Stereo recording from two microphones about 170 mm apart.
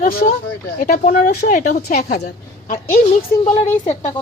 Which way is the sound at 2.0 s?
65° left (ahead or behind).